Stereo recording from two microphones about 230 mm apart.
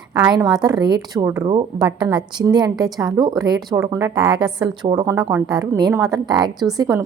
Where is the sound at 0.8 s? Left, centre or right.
Centre.